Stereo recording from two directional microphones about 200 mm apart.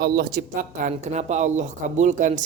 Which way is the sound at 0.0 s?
50° right (ahead or behind).